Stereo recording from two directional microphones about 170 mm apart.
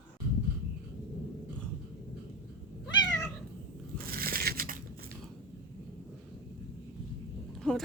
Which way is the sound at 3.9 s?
60° right (ahead or behind).